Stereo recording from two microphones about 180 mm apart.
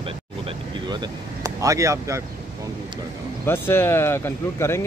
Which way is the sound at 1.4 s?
20° right (ahead or behind).